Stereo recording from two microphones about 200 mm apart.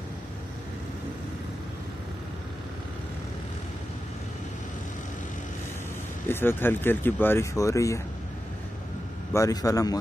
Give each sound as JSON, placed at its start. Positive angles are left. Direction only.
{"t": 6.2, "sound": "speech", "side_deg": 10}
{"t": 9.3, "sound": "speech", "side_deg": 15}